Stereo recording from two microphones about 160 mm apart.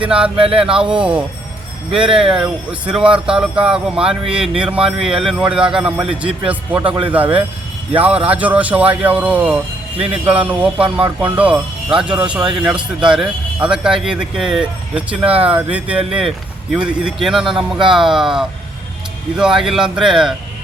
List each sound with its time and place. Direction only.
0.0 s a man's voice: 5° right (ahead or behind)
0.3 s speech: 35° right (ahead or behind)
0.6 s a man's voice: 5° right (ahead or behind)